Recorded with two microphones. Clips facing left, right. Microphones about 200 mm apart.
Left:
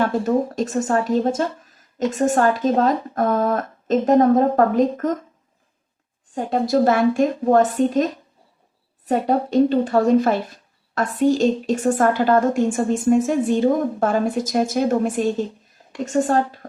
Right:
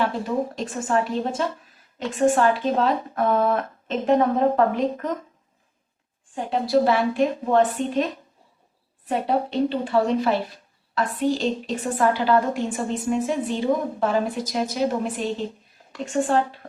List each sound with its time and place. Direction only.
0.0 s speech: 45° left (ahead or behind)
6.3 s speech: 45° left (ahead or behind)